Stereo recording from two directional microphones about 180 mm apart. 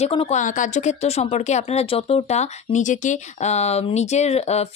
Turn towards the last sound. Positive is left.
turn(degrees=35)  # may be behind; listen again after turning